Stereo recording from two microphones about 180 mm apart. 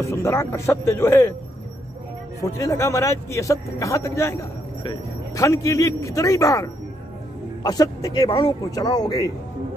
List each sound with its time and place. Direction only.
0.0 s a man's voice: 15° left (ahead or behind)
2.4 s a man's voice: 15° left (ahead or behind)